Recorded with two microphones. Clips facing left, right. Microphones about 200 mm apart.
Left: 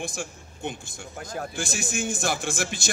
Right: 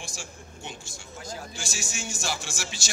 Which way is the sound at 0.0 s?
55° left (ahead or behind).